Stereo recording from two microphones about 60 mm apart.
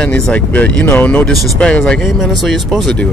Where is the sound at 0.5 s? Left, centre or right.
Left.